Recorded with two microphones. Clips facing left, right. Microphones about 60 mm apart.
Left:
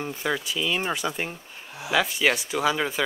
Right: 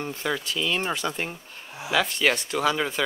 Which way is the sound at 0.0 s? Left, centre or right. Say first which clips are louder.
Left 1 dB; centre.